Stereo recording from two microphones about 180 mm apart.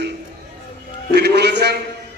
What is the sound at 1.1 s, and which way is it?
Speech, 65° right (ahead or behind).